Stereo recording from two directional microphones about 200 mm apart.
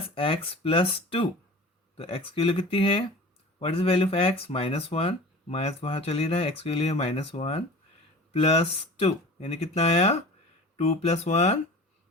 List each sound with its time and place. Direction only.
0.1 s speech: 25° left (ahead or behind)